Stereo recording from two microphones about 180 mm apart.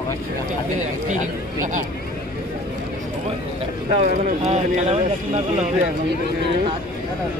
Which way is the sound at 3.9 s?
40° right (ahead or behind).